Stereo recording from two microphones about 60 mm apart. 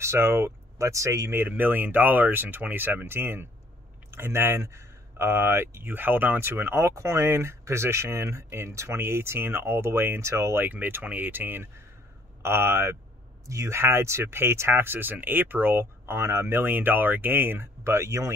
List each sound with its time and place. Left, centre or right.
0.0 s speech: right
1.3 s speech: right
6.9 s speech: right
10.7 s speech: right
13.5 s speech: right
13.7 s speech: right